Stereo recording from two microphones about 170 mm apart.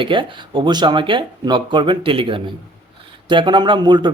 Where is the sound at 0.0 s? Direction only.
30° right (ahead or behind).